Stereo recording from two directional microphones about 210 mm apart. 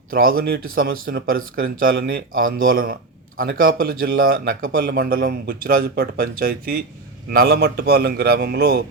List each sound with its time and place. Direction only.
0.1 s speech: 45° right (ahead or behind)